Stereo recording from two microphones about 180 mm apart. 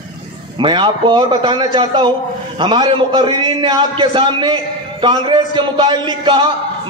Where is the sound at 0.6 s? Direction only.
25° right (ahead or behind).